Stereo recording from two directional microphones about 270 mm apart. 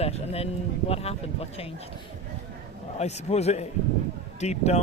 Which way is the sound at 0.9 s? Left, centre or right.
Left.